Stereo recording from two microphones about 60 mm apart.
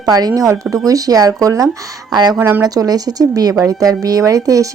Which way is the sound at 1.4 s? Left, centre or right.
Right.